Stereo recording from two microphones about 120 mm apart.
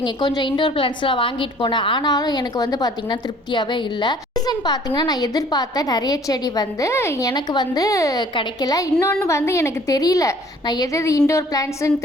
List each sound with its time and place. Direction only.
0.0 s a woman's voice: 40° left (ahead or behind)